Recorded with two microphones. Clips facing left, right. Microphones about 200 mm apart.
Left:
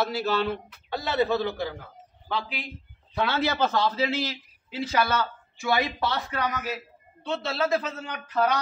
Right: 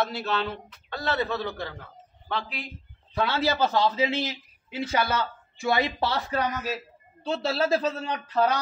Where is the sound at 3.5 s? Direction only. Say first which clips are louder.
Right 1 dB; 15° right (ahead or behind).